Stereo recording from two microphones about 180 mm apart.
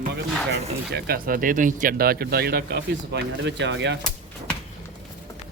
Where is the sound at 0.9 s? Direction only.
60° right (ahead or behind); by 3.9 s 80° right.